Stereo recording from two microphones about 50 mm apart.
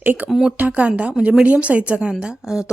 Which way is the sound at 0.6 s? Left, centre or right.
Right.